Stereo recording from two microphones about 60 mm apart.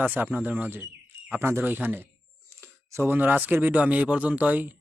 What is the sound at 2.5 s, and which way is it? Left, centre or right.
Speech, right.